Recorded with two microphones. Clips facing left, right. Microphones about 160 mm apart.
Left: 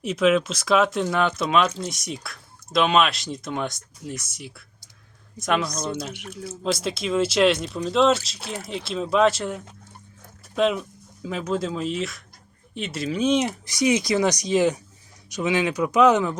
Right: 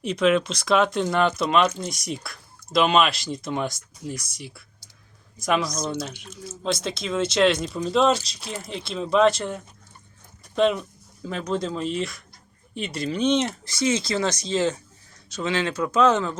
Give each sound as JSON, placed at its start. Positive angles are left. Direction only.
{"t": 0.0, "sound": "speech", "side_deg": 5}
{"t": 6.1, "sound": "speech", "side_deg": 65}
{"t": 6.6, "sound": "speech", "side_deg": 0}